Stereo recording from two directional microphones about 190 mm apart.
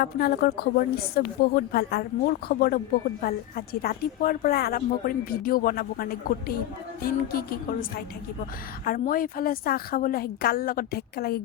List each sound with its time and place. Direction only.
0.0 s a woman's voice: 55° left (ahead or behind)